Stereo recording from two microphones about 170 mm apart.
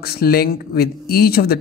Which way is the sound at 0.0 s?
65° left (ahead or behind).